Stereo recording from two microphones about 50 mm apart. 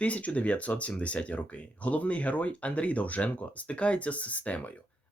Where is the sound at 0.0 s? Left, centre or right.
Left.